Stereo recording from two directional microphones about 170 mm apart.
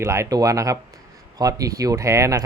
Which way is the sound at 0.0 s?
20° right (ahead or behind).